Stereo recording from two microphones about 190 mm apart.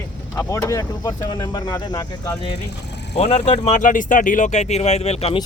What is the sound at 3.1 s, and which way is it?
Speech, 35° left (ahead or behind).